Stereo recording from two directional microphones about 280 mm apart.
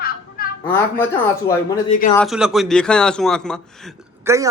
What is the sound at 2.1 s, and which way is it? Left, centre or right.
A man's voice, centre.